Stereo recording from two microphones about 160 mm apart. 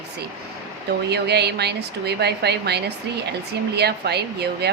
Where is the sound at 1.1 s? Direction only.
90° right.